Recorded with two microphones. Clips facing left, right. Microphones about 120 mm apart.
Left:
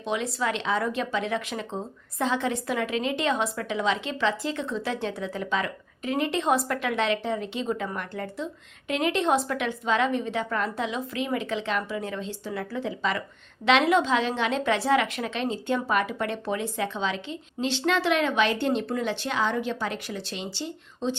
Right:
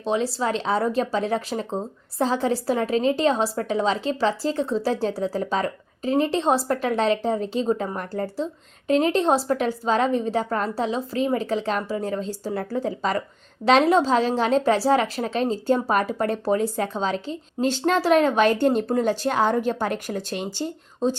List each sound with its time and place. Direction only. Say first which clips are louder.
0.0 s speech: right 4 dB; 35° right (ahead or behind)